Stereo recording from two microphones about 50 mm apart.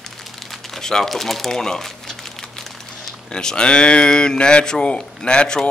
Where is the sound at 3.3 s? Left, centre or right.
Centre.